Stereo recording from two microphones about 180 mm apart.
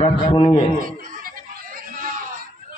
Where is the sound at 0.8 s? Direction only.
50° right (ahead or behind).